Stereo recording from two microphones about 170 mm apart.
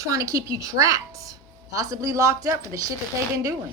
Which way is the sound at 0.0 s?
20° right (ahead or behind).